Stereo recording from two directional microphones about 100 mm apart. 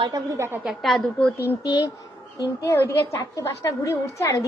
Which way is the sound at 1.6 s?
40° left (ahead or behind).